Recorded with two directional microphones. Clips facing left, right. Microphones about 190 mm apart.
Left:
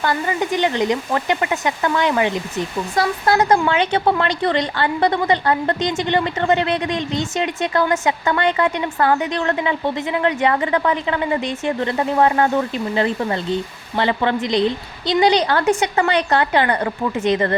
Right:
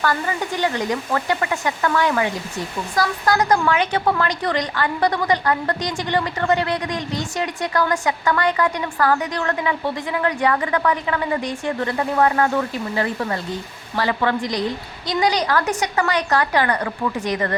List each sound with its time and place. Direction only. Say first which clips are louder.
0.0 s speech: left 2 dB; 20° left (ahead or behind)